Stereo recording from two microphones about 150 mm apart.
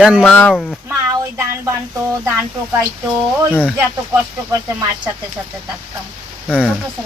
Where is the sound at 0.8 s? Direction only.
20° right (ahead or behind).